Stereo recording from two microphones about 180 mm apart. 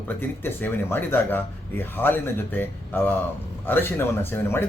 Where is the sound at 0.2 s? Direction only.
10° left (ahead or behind).